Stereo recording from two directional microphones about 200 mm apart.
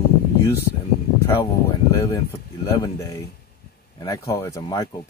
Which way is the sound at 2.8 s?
15° left (ahead or behind).